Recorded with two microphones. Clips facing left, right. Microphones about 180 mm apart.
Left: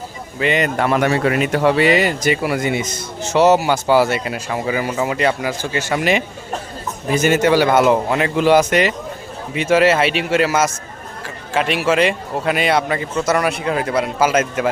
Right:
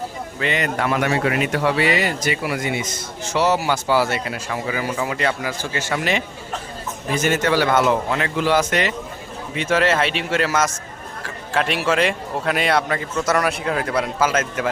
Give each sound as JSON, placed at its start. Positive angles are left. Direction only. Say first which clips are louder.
{"t": 0.3, "sound": "speech", "louder": "left 5 dB", "side_deg": 15}
{"t": 0.8, "sound": "a man's voice", "louder": "left 2 dB", "side_deg": 35}
{"t": 1.7, "sound": "a man's voice", "louder": "left 5 dB", "side_deg": 20}